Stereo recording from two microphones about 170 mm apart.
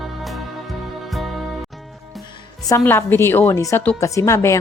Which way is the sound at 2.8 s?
15° left (ahead or behind).